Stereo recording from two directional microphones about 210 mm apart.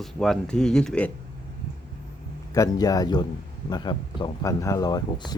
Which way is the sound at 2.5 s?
15° left (ahead or behind).